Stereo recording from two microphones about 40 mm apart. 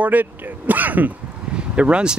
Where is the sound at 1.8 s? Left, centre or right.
Right.